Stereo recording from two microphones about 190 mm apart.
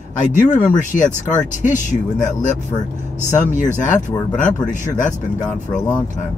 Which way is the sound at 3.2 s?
40° left (ahead or behind).